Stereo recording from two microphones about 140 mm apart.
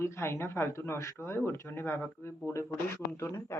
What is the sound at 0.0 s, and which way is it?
Speech, 20° left (ahead or behind).